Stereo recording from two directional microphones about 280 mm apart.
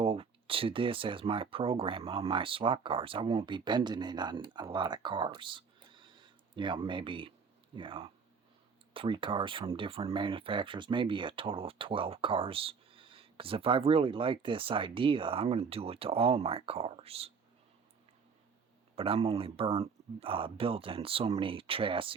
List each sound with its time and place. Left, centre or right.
0.0 s speech: centre
18.9 s speech: centre